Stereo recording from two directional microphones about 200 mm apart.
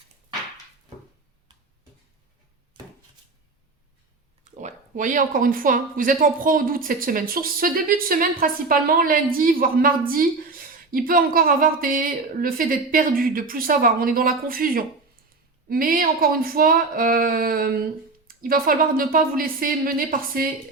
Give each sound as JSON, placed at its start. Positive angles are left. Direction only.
{"t": 4.5, "sound": "speech", "side_deg": -40}
{"t": 10.9, "sound": "speech", "side_deg": -45}